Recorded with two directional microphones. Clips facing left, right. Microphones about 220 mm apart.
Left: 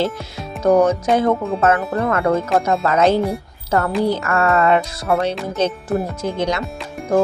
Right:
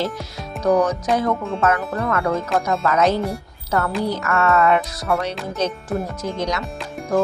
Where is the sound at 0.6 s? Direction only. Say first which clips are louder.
Left 4 dB; 25° left (ahead or behind).